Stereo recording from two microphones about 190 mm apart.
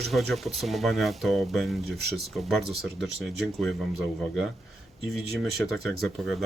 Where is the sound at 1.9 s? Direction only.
60° right (ahead or behind).